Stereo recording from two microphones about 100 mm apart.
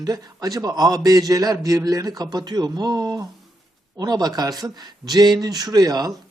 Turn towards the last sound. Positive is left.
turn(degrees=-40)  # may be behind; listen again after turning